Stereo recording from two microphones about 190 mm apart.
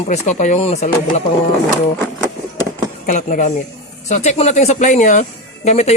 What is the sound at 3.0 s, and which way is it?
Speech, 40° left (ahead or behind).